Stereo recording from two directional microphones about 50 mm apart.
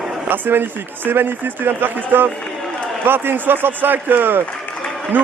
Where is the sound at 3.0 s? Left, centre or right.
Right.